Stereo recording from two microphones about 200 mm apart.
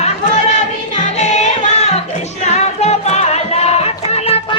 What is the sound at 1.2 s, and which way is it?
Music, 35° left (ahead or behind).